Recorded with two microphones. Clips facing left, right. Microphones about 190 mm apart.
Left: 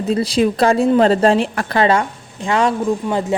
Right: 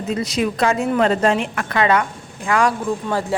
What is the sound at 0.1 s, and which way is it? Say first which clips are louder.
A woman's voice: left 5 dB; 30° left (ahead or behind).